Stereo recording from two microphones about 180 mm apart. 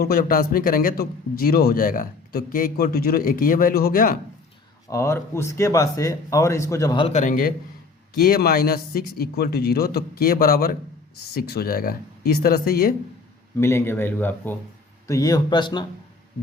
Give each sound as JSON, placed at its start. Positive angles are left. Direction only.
{"t": 0.0, "sound": "a man's voice", "side_deg": 55}
{"t": 4.9, "sound": "speech", "side_deg": 15}
{"t": 7.1, "sound": "a man's voice", "side_deg": 45}
{"t": 13.6, "sound": "speech", "side_deg": 15}